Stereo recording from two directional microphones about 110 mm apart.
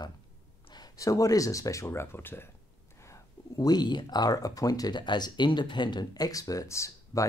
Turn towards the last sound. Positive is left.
turn(degrees=30)  # may be behind; listen again after turning